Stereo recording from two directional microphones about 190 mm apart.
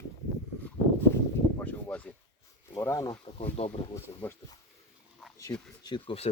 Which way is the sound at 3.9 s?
15° left (ahead or behind).